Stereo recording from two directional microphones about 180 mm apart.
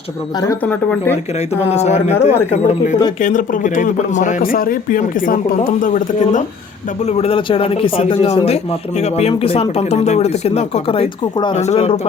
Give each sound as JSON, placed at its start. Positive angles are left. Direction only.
{"t": 0.4, "sound": "speech", "side_deg": 10}
{"t": 1.7, "sound": "speech", "side_deg": 40}
{"t": 7.1, "sound": "speech", "side_deg": 35}